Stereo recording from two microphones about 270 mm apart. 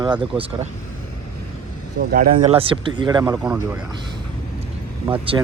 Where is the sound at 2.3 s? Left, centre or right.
Centre.